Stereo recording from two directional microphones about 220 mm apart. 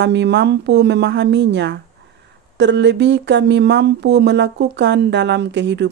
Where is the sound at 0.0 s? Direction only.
50° right (ahead or behind).